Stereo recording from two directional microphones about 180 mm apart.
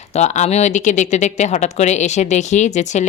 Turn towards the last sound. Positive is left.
turn(degrees=40)  # may be behind; listen again after turning